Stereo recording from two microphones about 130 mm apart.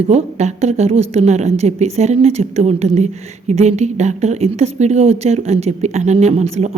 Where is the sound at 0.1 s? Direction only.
60° right (ahead or behind).